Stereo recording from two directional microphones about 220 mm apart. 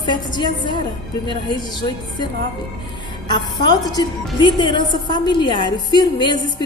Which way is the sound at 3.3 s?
20° left (ahead or behind).